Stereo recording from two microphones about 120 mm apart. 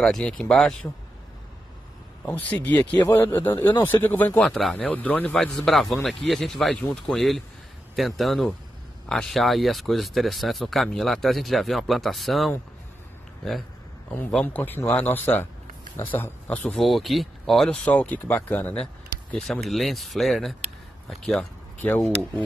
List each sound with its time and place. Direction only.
0.0 s speech: 5° left (ahead or behind)
2.2 s speech: 15° left (ahead or behind)
4.5 s speech: 5° left (ahead or behind)
14.4 s speech: 15° left (ahead or behind)